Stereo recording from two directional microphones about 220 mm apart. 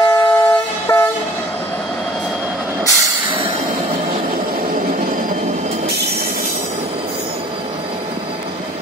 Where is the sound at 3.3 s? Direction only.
25° right (ahead or behind).